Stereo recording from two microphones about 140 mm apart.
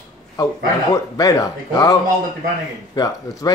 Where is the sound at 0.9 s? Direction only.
25° left (ahead or behind).